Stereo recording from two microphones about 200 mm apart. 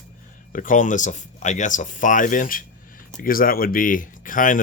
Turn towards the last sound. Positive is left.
turn(degrees=40)  # may be behind; listen again after turning